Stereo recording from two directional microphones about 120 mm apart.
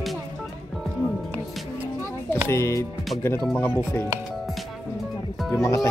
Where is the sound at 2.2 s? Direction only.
20° left (ahead or behind).